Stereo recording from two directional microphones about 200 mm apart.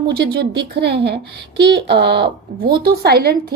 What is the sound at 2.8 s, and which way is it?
Speech, 55° right (ahead or behind).